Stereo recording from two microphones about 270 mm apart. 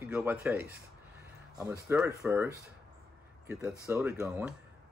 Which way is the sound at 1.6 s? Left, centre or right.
Centre.